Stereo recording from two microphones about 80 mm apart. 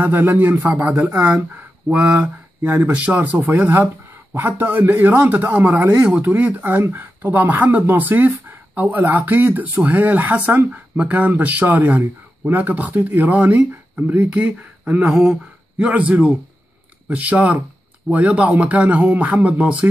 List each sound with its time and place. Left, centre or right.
0.0 s speech: right
1.1 s a man's voice: centre
15.0 s a man's voice: centre